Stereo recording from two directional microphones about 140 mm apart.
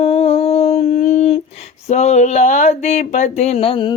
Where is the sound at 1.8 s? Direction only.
55° left (ahead or behind).